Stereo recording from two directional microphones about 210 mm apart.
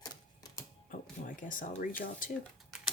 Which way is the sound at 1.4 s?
40° left (ahead or behind).